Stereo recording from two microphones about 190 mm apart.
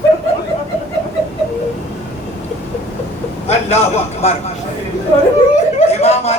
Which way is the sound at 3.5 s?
35° left (ahead or behind).